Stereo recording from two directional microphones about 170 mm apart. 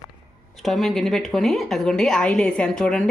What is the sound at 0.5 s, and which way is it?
A woman's voice, centre (ahead or behind).